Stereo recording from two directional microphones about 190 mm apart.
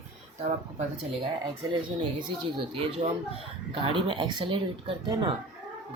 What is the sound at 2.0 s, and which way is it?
A woman's voice, 25° right (ahead or behind).